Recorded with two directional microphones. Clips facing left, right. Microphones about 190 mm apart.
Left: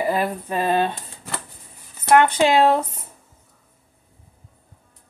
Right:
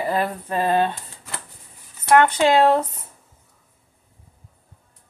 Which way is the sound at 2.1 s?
20° left (ahead or behind).